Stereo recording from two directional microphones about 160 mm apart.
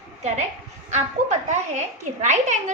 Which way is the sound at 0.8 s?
45° right (ahead or behind).